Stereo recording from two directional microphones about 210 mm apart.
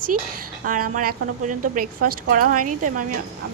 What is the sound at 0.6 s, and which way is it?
A woman's voice, 40° right (ahead or behind).